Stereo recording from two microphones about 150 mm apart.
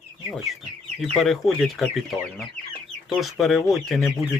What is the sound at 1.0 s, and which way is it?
Speech, centre (ahead or behind).